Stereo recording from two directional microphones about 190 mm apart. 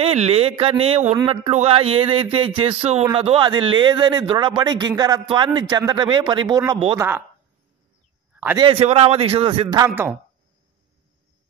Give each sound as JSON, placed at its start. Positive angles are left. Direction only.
{"t": 0.0, "sound": "a man's voice", "side_deg": -30}
{"t": 7.0, "sound": "speech", "side_deg": -10}
{"t": 8.5, "sound": "a man's voice", "side_deg": -30}